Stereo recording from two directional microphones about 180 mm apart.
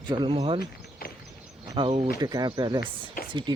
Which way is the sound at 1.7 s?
30° right (ahead or behind).